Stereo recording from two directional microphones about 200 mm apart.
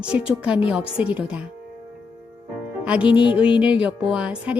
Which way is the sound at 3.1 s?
25° left (ahead or behind).